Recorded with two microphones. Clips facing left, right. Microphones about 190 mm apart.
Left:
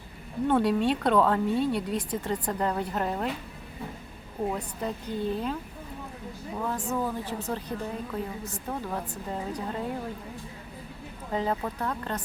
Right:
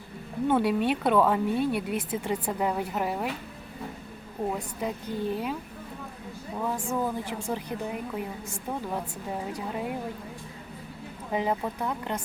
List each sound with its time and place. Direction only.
0.4 s a woman's voice: 5° right (ahead or behind)
4.5 s a woman's voice: 15° right (ahead or behind)
6.6 s a woman's voice: 10° right (ahead or behind)
11.3 s a woman's voice: 15° right (ahead or behind)